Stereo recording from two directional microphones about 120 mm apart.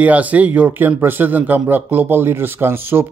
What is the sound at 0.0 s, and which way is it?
Speech, 10° right (ahead or behind).